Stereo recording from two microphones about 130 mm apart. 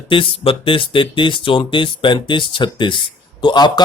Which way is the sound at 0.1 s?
45° left (ahead or behind).